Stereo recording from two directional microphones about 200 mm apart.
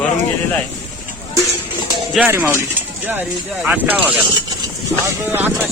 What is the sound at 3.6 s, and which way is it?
Speech, 5° right (ahead or behind).